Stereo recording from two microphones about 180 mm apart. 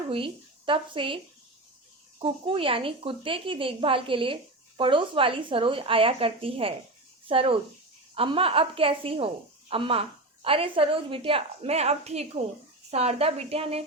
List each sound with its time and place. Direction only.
0.1 s a woman's voice: 30° right (ahead or behind)